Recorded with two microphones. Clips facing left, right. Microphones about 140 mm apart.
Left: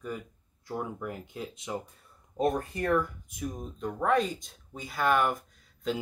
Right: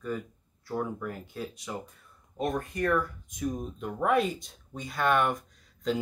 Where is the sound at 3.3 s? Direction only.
Centre (ahead or behind).